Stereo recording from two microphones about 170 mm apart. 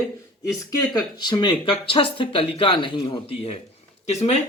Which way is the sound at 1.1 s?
25° left (ahead or behind).